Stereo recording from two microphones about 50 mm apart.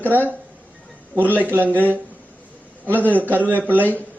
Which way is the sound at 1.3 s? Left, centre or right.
Right.